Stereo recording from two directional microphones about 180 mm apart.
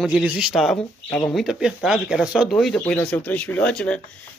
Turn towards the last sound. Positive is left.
turn(degrees=5)  # may be behind; listen again after turning